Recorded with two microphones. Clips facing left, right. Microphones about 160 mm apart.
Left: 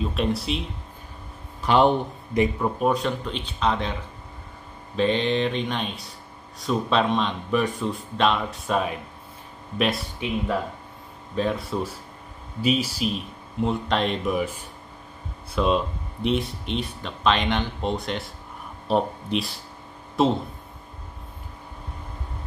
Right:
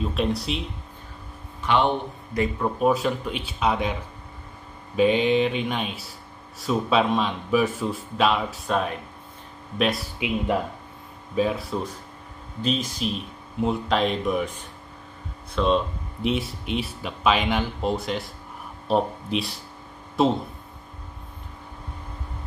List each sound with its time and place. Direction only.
0.0 s speech: centre (ahead or behind)
1.6 s a man's voice: 35° left (ahead or behind)
2.6 s speech: centre (ahead or behind)
4.9 s speech: 10° right (ahead or behind)
11.3 s speech: 5° right (ahead or behind)
15.5 s speech: 5° left (ahead or behind)